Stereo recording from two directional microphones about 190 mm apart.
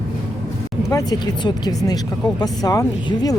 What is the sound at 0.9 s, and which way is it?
Speech, 20° left (ahead or behind).